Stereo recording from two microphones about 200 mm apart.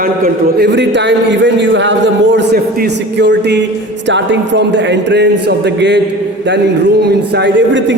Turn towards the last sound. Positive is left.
turn(degrees=-65)  # may be behind; listen again after turning